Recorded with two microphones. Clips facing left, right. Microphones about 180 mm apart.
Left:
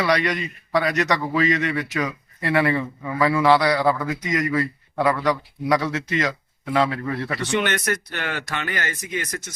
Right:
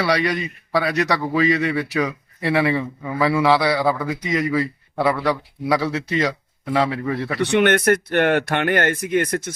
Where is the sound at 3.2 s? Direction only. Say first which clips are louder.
Even; 5° right (ahead or behind).